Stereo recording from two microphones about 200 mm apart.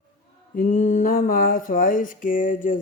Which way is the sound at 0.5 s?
40° left (ahead or behind).